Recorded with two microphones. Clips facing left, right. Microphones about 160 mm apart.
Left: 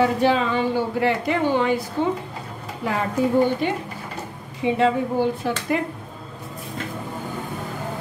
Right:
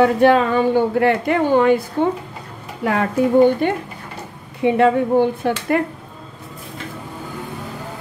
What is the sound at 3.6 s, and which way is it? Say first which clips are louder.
A woman's voice: right 4 dB; 50° right (ahead or behind).